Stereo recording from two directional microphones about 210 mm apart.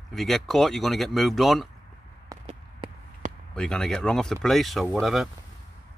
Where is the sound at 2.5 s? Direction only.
30° right (ahead or behind).